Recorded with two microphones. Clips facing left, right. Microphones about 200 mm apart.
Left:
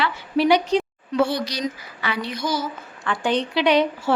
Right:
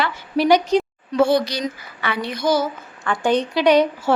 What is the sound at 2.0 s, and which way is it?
Child singing, 55° right (ahead or behind).